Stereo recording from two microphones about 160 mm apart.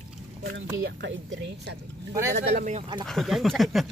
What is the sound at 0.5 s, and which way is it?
Speech, 90° right.